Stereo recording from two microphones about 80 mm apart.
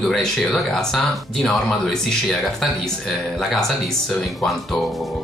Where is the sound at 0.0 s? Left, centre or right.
Centre.